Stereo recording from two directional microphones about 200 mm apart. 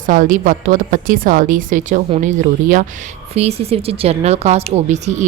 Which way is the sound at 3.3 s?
30° right (ahead or behind).